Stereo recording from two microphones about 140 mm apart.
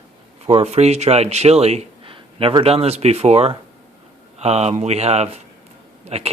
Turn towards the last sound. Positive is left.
turn(degrees=-45)  # may be behind; listen again after turning